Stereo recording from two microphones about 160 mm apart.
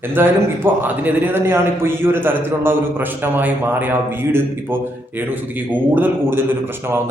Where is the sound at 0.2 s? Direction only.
15° right (ahead or behind).